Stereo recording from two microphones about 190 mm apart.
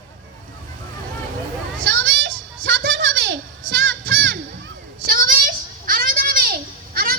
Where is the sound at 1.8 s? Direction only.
75° right (ahead or behind).